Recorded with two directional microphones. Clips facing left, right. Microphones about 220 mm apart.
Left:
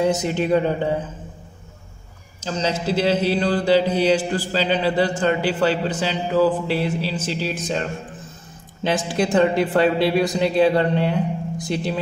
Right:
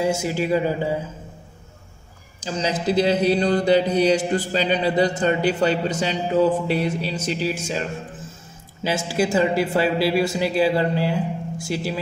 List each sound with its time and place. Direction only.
0.0 s speech: 10° right (ahead or behind)
2.4 s speech: 10° right (ahead or behind)
2.9 s mantra: 20° right (ahead or behind)
7.3 s speech: 10° right (ahead or behind)
8.8 s speech: 5° right (ahead or behind)